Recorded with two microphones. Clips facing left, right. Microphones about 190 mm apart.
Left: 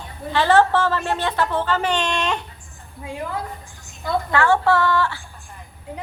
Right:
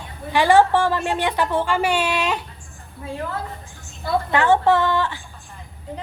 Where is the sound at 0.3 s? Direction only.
15° right (ahead or behind).